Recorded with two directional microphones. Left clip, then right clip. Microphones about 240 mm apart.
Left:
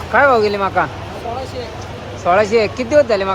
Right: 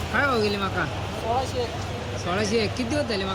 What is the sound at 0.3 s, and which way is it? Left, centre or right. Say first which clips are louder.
Speech: left 9 dB; centre.